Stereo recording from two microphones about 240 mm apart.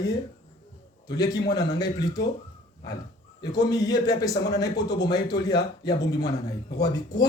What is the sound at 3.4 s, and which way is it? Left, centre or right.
Speech, centre.